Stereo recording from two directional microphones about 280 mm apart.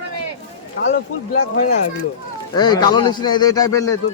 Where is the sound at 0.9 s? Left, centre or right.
Left.